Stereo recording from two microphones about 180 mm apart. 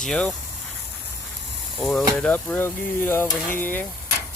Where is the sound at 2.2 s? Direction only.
10° left (ahead or behind).